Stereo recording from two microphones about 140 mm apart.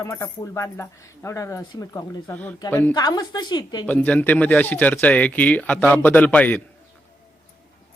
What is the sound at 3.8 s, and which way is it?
Speech, 10° left (ahead or behind).